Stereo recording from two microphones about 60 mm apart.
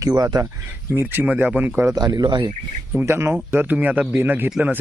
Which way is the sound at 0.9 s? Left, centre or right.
Right.